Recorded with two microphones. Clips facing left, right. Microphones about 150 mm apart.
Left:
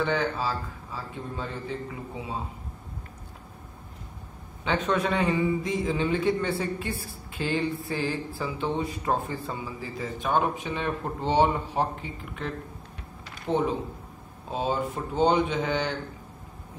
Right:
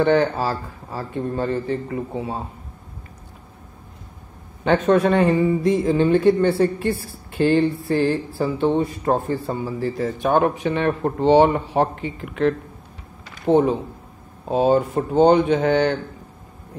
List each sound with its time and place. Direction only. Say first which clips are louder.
0.0 s a woman's voice: right 9 dB; 65° right (ahead or behind)
4.6 s a man's voice: right 9 dB; 50° right (ahead or behind)
8.7 s a man's voice: right 7 dB; 45° right (ahead or behind)
9.8 s speech: right 10 dB; 65° right (ahead or behind)
13.5 s a woman's voice: right 9 dB; 60° right (ahead or behind)